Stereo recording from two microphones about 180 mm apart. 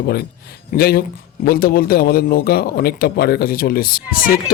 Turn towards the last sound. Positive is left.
turn(degrees=50)  # may be behind; listen again after turning